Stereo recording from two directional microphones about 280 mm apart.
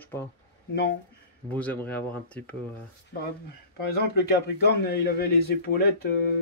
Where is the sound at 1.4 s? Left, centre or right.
Centre.